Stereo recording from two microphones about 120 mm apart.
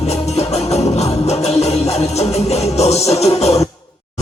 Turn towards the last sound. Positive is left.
turn(degrees=65)  # may be behind; listen again after turning